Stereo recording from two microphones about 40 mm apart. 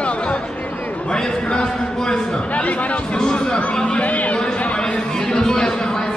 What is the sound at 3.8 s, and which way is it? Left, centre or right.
Speech, left.